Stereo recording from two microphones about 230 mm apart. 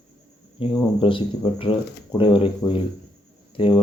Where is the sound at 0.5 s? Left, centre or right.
Left.